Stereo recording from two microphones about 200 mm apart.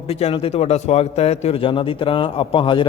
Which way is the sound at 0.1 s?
30° left (ahead or behind).